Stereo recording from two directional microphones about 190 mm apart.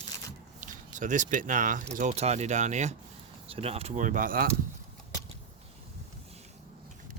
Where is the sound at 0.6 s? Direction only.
40° right (ahead or behind).